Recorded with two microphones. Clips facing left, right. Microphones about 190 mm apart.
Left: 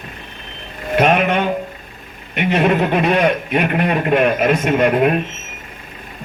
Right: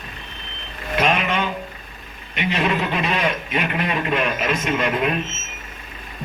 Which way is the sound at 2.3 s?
55° left (ahead or behind).